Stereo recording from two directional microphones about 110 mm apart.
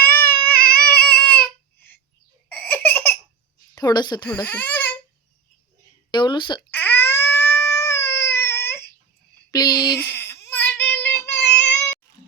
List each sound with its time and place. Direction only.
0.0 s crying: 15° left (ahead or behind)
2.5 s laughter: 15° left (ahead or behind)
3.8 s a sound: 40° left (ahead or behind)
4.3 s speech: 15° left (ahead or behind)
6.1 s speech: 45° left (ahead or behind)
6.7 s baby cry: 15° left (ahead or behind)
9.5 s a sound: 35° left (ahead or behind)
10.0 s baby cry: 20° left (ahead or behind)